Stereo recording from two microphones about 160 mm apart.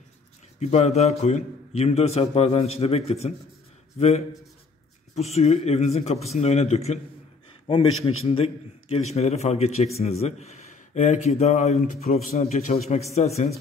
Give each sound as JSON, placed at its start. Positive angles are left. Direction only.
{"t": 0.6, "sound": "a man's voice", "side_deg": 45}